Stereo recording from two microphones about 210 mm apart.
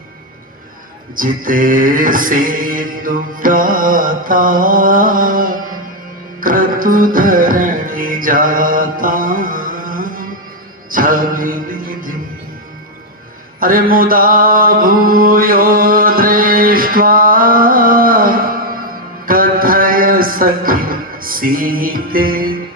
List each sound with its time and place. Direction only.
1.1 s music: 40° right (ahead or behind)
10.9 s mantra: 40° right (ahead or behind)
13.6 s mantra: 40° right (ahead or behind)
19.2 s a sound: 40° right (ahead or behind)